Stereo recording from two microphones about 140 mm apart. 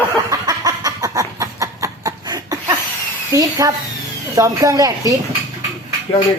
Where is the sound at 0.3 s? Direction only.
25° right (ahead or behind).